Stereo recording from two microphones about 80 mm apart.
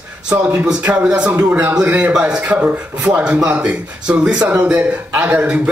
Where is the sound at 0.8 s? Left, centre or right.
Centre.